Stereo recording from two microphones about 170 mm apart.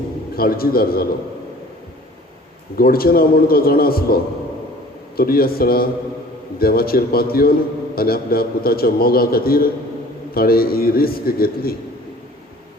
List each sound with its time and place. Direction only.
0.3 s a man's voice: 60° left (ahead or behind)
2.7 s a man's voice: 60° left (ahead or behind)